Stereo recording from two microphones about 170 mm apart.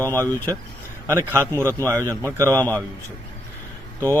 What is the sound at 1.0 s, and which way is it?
Speech, 15° right (ahead or behind).